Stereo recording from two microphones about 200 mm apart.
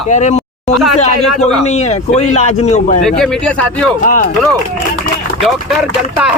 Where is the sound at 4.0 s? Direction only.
40° left (ahead or behind).